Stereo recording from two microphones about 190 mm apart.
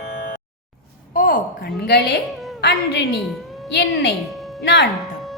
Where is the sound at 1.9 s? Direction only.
60° left (ahead or behind).